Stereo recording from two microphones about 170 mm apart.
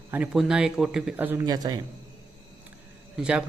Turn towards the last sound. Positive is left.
turn(degrees=-5)  # may be behind; listen again after turning